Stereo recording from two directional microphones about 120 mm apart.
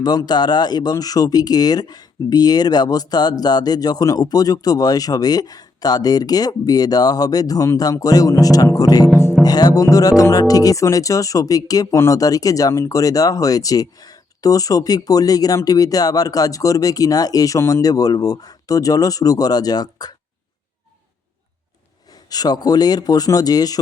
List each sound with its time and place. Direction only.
0.0 s speech: 35° left (ahead or behind)
22.1 s speech: 35° left (ahead or behind)